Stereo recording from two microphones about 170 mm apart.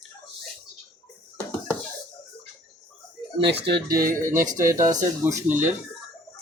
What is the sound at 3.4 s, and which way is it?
Speech, 85° right.